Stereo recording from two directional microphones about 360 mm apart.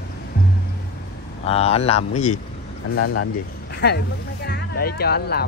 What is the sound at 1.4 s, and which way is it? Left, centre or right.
Speech, centre.